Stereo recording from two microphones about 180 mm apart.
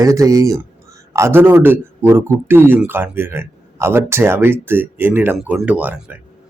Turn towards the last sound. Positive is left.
turn(degrees=-10)  # may be behind; listen again after turning